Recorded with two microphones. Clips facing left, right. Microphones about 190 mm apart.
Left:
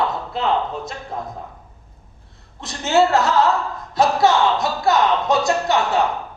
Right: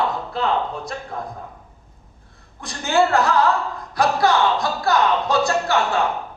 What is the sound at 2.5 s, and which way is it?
A man's voice, 25° left (ahead or behind).